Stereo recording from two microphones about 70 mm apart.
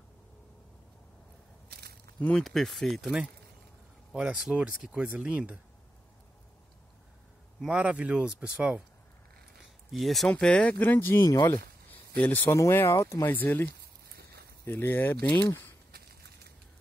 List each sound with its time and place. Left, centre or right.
2.3 s speech: centre
4.1 s speech: centre
7.6 s speech: centre
9.8 s speech: centre
10.4 s speech: centre
11.4 s a sound: left
12.4 s speech: left